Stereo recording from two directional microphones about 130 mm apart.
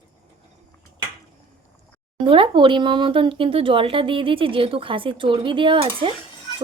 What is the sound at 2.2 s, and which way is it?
Speech, 40° right (ahead or behind).